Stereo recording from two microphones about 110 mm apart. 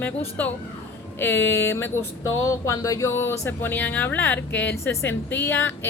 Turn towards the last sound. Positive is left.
turn(degrees=20)  # may be behind; listen again after turning